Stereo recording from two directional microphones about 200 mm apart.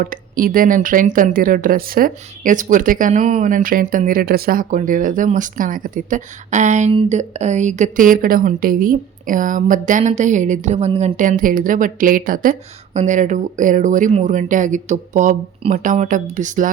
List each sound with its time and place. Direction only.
0.0 s speech: 45° right (ahead or behind)